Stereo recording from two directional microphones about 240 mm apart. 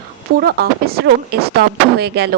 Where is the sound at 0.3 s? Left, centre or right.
Right.